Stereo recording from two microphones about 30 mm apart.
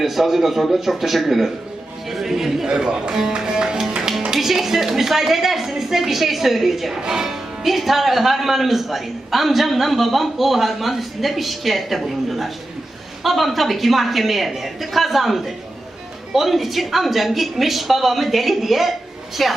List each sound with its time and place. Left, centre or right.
0.0 s speech: centre
2.0 s a sound: centre
2.6 s speech: right
3.2 s speech: centre
3.4 s music: right
4.4 s speech: centre
7.0 s speech: centre